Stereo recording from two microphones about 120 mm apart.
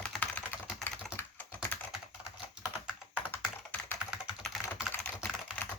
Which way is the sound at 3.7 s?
15° left (ahead or behind).